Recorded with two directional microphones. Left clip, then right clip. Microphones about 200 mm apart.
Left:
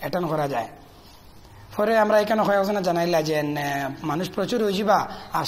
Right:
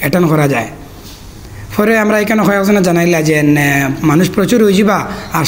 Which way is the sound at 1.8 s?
45° right (ahead or behind).